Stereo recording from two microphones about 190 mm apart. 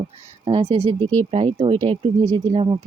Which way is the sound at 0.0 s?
30° right (ahead or behind).